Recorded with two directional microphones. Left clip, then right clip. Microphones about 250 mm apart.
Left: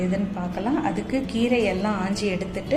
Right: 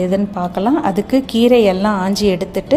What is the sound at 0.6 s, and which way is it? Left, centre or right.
A woman's voice, right.